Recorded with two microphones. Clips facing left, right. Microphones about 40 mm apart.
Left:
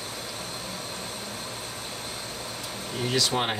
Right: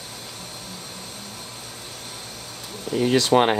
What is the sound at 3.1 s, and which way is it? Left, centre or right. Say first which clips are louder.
Speech: right 8 dB; right.